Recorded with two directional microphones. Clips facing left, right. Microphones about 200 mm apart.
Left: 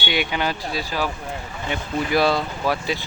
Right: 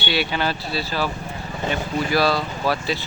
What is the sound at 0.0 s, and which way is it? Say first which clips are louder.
Speech: right 1 dB; 15° left (ahead or behind).